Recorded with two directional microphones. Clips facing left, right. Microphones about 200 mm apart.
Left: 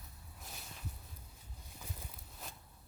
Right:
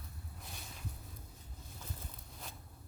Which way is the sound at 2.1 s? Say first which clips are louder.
Right 1 dB; centre (ahead or behind).